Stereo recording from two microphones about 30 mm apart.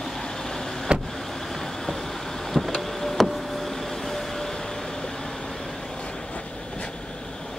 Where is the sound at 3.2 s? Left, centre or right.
Centre.